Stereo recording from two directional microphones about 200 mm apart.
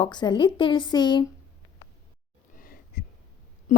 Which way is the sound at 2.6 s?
45° left (ahead or behind).